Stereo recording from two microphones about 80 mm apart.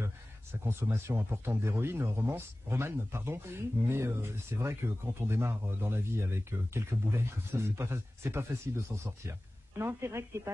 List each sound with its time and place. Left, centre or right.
0.7 s speech: right